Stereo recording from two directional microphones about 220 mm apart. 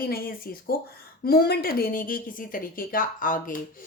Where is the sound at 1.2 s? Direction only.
45° left (ahead or behind).